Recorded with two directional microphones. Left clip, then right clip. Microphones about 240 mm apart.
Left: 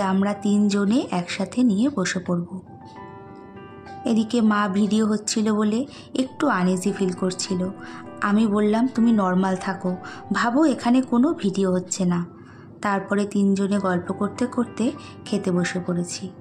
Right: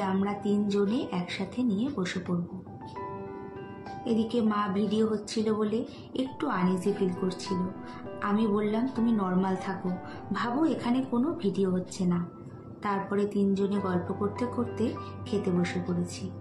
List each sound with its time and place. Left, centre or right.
0.0 s a woman's voice: left
4.0 s a woman's voice: left